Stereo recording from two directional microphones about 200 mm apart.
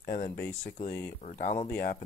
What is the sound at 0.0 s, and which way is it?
Speech, 45° left (ahead or behind).